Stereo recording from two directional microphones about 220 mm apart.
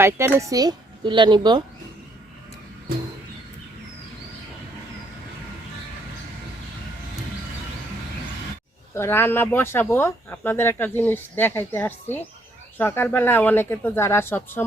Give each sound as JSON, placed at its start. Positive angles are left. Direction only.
{"t": 0.0, "sound": "speech", "side_deg": -10}
{"t": 9.0, "sound": "speech", "side_deg": 10}